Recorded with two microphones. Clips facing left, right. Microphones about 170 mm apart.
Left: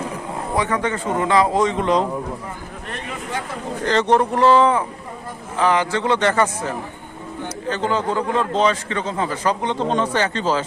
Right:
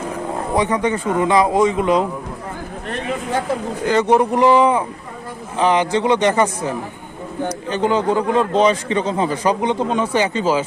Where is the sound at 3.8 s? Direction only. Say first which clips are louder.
Right 2 dB; 10° right (ahead or behind).